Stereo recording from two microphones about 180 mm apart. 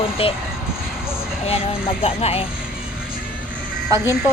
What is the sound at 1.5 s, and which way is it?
Speech, 30° left (ahead or behind).